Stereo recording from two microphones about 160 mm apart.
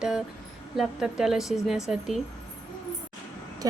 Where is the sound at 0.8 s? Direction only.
5° right (ahead or behind).